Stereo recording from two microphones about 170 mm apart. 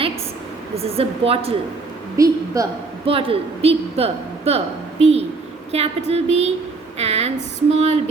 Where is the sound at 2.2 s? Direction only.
20° right (ahead or behind).